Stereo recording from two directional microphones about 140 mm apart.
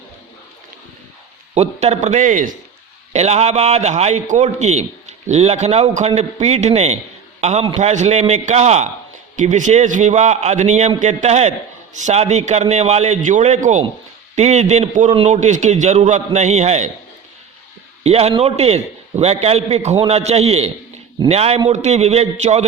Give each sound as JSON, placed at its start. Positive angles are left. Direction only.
{"t": 1.5, "sound": "a man's voice", "side_deg": -50}
{"t": 3.1, "sound": "a man's voice", "side_deg": -50}
{"t": 18.0, "sound": "a man's voice", "side_deg": -45}